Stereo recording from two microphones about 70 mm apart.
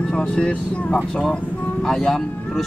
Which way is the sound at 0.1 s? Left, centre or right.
Centre.